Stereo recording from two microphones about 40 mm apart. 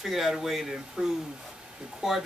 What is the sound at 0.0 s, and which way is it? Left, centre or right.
Speech, centre.